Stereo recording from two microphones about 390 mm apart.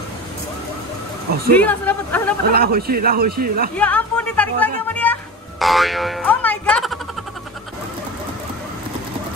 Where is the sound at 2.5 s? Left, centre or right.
Right.